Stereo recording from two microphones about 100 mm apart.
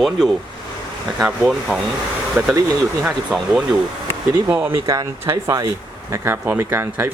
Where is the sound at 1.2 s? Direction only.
10° right (ahead or behind).